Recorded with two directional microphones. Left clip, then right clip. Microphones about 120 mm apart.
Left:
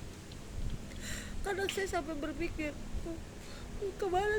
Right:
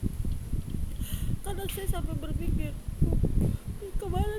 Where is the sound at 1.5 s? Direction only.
15° right (ahead or behind).